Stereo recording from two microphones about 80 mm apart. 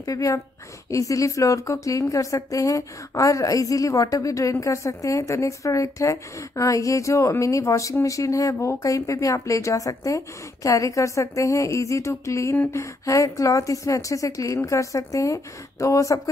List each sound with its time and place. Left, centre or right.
0.0 s speech: left